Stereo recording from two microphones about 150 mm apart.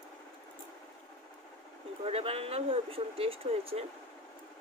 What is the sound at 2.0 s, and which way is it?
Speech, 40° right (ahead or behind).